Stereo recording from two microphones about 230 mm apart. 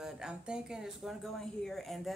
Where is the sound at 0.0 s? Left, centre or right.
Centre.